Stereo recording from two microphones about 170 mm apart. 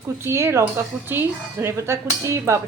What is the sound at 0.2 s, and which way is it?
Speech, 15° right (ahead or behind).